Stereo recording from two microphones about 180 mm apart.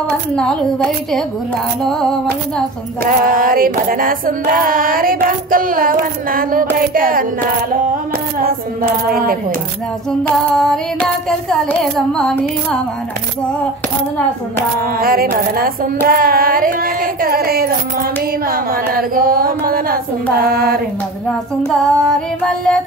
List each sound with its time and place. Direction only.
0.4 s child singing: centre (ahead or behind)
3.0 s female singing: 50° right (ahead or behind)
8.4 s female singing: 55° right (ahead or behind)
10.2 s child singing: 5° left (ahead or behind)
15.0 s speech: 55° right (ahead or behind)
16.1 s female singing: 55° right (ahead or behind)
20.3 s speech: 55° right (ahead or behind)
21.3 s child singing: 5° left (ahead or behind)